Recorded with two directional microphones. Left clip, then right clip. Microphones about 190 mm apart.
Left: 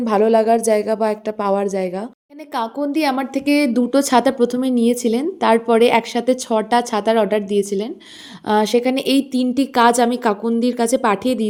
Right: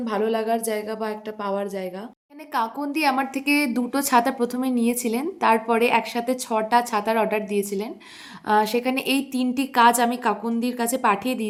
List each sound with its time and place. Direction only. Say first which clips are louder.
0.0 s a woman's voice: left 9 dB; 45° left (ahead or behind)
2.5 s a woman's voice: left 3 dB; 25° left (ahead or behind)